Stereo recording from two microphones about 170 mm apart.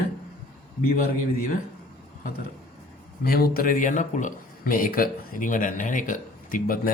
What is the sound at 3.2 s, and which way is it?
A man's voice, 60° left (ahead or behind).